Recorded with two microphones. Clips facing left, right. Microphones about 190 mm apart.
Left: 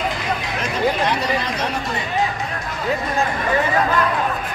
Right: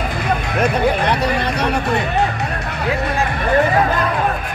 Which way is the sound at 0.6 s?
60° right (ahead or behind).